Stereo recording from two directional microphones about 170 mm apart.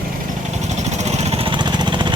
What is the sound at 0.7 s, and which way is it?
Vehicle, 40° right (ahead or behind).